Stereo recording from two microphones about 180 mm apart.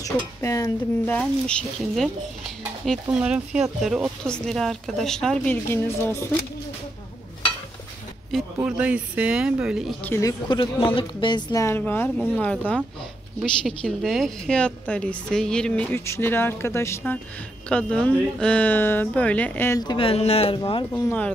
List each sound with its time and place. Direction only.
0.0 s speech: 15° left (ahead or behind)
8.3 s speech: centre (ahead or behind)
10.0 s a woman's voice: 15° left (ahead or behind)
10.5 s a man's voice: 25° left (ahead or behind); by 12.8 s 5° left (ahead or behind)
13.8 s a woman's voice: centre (ahead or behind)
19.8 s speech: 25° left (ahead or behind)
20.9 s a woman's voice: 10° left (ahead or behind)